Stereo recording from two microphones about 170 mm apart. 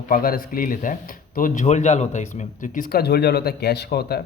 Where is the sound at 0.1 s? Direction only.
55° left (ahead or behind).